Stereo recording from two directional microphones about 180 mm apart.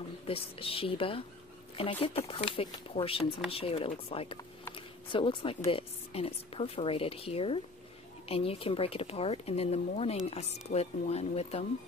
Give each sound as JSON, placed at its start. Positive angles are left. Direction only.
{"t": 0.3, "sound": "speech", "side_deg": 30}
{"t": 4.7, "sound": "a sound", "side_deg": 30}
{"t": 5.7, "sound": "speech", "side_deg": 30}